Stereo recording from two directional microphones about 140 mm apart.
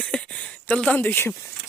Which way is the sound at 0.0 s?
10° left (ahead or behind).